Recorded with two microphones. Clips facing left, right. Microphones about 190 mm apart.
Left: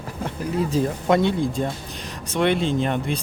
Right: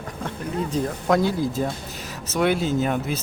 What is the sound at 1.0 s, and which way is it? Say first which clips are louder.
Speech: even; centre (ahead or behind).